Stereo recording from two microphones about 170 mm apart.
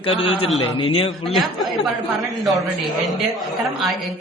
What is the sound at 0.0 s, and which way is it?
A man's voice, 35° left (ahead or behind).